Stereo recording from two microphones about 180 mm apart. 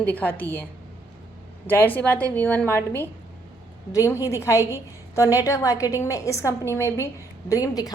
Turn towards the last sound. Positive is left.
turn(degrees=20)  # may be behind; listen again after turning